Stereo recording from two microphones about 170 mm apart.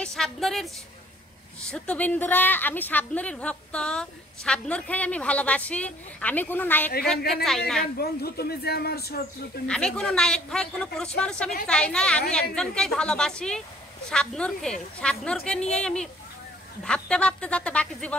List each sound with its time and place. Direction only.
0.0 s a man's voice: centre (ahead or behind)
1.7 s a woman's voice: 10° left (ahead or behind)
8.0 s speech: 65° left (ahead or behind)
9.7 s a man's voice: 5° left (ahead or behind)